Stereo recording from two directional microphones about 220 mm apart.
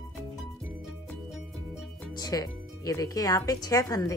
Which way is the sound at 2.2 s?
15° left (ahead or behind).